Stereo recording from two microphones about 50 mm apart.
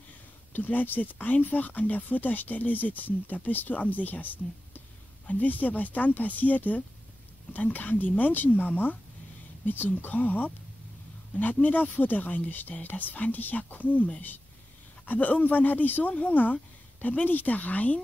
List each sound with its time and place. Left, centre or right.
0.5 s speech: left